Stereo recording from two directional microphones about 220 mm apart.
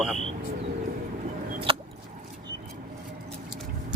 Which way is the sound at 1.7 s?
25° right (ahead or behind).